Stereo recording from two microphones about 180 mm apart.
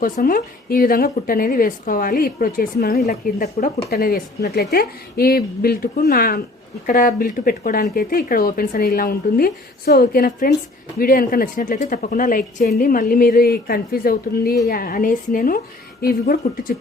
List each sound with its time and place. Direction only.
0.0 s a woman's voice: 50° left (ahead or behind)